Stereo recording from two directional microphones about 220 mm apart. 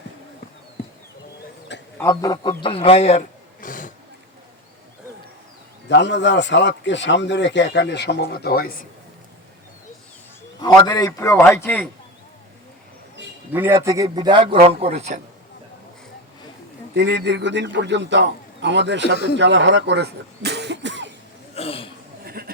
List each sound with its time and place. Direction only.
2.0 s a man's voice: 15° left (ahead or behind); by 3.9 s 35° left (ahead or behind)
5.9 s a man's voice: 55° left (ahead or behind)
10.6 s a man's voice: 15° left (ahead or behind)
13.5 s a man's voice: 10° right (ahead or behind); by 15.2 s 30° right (ahead or behind)
16.9 s a man's voice: 50° right (ahead or behind)
21.5 s a sound: 25° left (ahead or behind)
22.2 s a sound: 45° right (ahead or behind)